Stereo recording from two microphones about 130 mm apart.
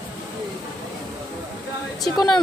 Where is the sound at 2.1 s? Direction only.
5° left (ahead or behind).